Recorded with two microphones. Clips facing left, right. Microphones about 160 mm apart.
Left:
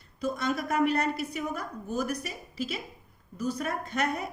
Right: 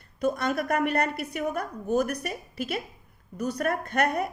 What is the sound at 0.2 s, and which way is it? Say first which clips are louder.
A woman's voice: right 4 dB; 55° right (ahead or behind).